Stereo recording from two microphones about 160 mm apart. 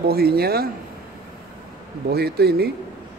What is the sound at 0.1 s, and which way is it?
Speech, 75° right (ahead or behind).